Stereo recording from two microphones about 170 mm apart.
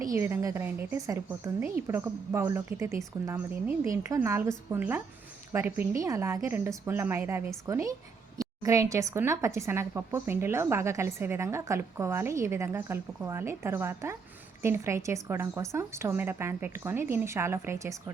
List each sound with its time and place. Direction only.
0.0 s a woman's voice: 15° right (ahead or behind)